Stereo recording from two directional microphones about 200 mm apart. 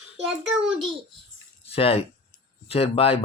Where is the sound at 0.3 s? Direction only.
Centre (ahead or behind).